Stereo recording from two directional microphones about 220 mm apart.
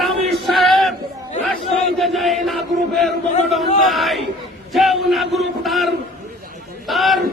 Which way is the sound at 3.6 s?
Centre (ahead or behind).